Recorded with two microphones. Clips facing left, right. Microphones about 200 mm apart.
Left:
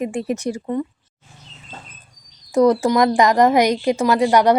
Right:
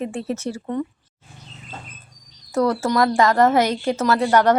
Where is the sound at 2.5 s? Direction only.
15° left (ahead or behind).